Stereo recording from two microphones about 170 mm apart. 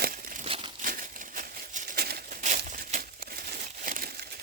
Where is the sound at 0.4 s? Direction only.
30° right (ahead or behind).